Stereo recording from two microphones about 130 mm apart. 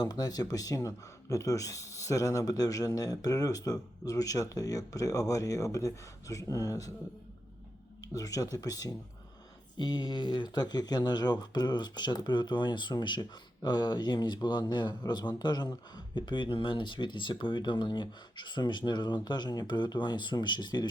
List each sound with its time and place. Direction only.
0.0 s speech: 30° left (ahead or behind)
8.1 s speech: 25° left (ahead or behind)